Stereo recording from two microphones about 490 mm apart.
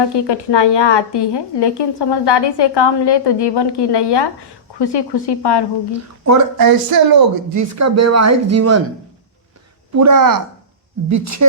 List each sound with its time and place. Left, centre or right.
0.1 s a woman's voice: left
6.2 s speech: right
9.9 s speech: right